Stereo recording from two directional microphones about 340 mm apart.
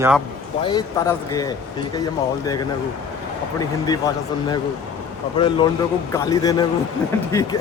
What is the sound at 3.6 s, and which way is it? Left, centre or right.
Speech, centre.